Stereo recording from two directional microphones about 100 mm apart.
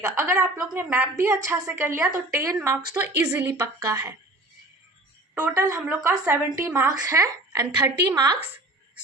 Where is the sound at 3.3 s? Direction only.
30° right (ahead or behind).